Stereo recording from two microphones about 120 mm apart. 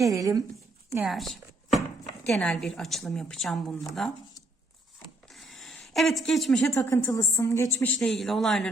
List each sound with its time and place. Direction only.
0.0 s speech: 30° right (ahead or behind)
1.0 s chopping: centre (ahead or behind)
2.2 s a woman's voice: 5° left (ahead or behind)
5.3 s a sound: centre (ahead or behind)
6.7 s a woman's voice: 20° left (ahead or behind)
7.9 s a woman's voice: 5° left (ahead or behind)